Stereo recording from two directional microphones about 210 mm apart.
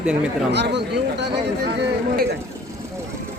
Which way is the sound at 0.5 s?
55° right (ahead or behind).